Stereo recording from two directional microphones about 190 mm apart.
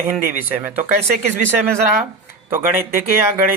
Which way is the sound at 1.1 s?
45° right (ahead or behind).